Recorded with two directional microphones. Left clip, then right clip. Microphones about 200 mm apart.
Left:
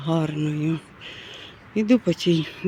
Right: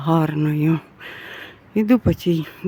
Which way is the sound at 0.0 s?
25° right (ahead or behind).